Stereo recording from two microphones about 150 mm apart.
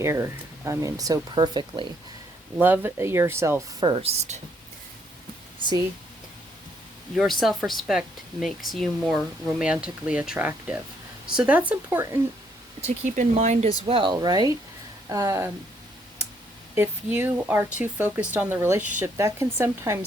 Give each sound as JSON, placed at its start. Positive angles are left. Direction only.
{"t": 0.0, "sound": "speech", "side_deg": -20}
{"t": 2.6, "sound": "speech", "side_deg": -15}
{"t": 3.8, "sound": "speech", "side_deg": -40}
{"t": 7.2, "sound": "speech", "side_deg": 0}
{"t": 12.8, "sound": "speech", "side_deg": -45}
{"t": 16.7, "sound": "speech", "side_deg": -15}